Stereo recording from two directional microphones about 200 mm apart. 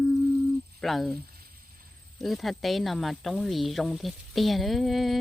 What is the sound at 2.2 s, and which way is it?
Speech, centre (ahead or behind).